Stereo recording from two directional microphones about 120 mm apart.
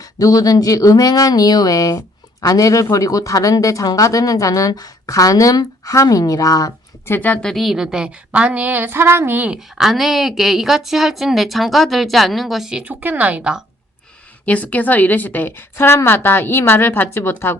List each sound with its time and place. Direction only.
0.2 s speech: 30° left (ahead or behind)
7.1 s a woman's voice: 15° left (ahead or behind)
7.5 s a woman's voice: centre (ahead or behind)
9.7 s speech: centre (ahead or behind)
14.4 s a woman's voice: 10° left (ahead or behind)